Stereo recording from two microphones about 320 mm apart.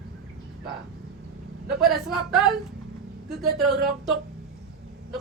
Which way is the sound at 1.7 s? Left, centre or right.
Centre.